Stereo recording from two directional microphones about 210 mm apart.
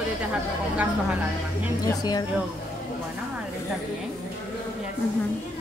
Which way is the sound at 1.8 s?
20° left (ahead or behind).